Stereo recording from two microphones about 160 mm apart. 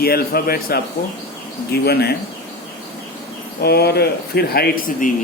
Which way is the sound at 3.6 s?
80° left.